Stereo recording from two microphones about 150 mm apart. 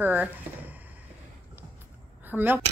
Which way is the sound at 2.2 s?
15° right (ahead or behind).